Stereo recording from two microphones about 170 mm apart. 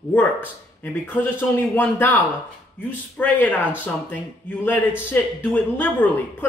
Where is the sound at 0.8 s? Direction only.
10° left (ahead or behind).